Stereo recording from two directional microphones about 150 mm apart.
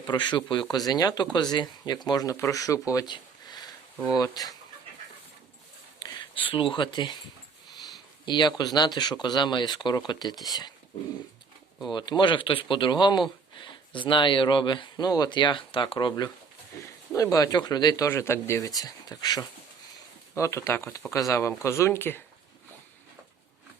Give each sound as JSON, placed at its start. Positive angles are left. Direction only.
{"t": 0.0, "sound": "speech", "side_deg": 30}
{"t": 6.0, "sound": "speech", "side_deg": 30}
{"t": 8.2, "sound": "speech", "side_deg": 30}
{"t": 11.9, "sound": "speech", "side_deg": 30}